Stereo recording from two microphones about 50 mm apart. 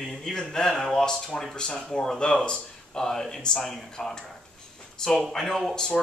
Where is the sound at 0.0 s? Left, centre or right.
Centre.